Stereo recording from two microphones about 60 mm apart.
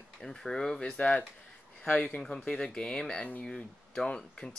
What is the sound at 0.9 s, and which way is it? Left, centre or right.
Speech, left.